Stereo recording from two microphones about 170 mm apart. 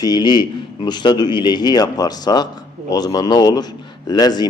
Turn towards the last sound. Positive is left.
turn(degrees=25)  # may be behind; listen again after turning